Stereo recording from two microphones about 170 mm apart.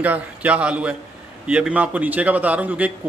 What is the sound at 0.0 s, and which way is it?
A man's voice, 10° right (ahead or behind).